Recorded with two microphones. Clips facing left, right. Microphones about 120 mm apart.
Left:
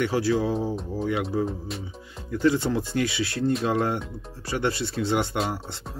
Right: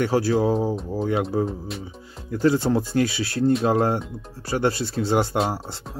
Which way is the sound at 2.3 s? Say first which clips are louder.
Right 3 dB; 40° right (ahead or behind).